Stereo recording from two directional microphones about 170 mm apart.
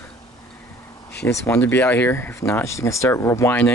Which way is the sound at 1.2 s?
15° left (ahead or behind).